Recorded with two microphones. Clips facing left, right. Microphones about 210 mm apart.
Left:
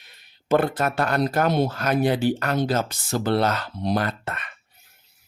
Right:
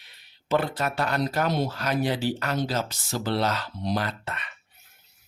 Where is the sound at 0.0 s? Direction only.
50° left (ahead or behind).